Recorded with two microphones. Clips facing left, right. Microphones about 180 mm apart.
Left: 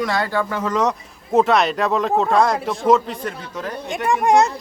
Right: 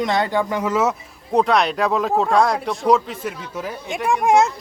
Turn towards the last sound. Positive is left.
turn(degrees=0)  # may be behind; listen again after turning